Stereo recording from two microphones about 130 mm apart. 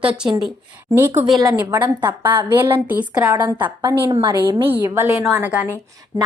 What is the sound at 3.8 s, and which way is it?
Speech, 35° right (ahead or behind).